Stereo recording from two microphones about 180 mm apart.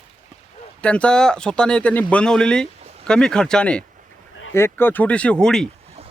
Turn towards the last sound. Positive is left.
turn(degrees=5)  # may be behind; listen again after turning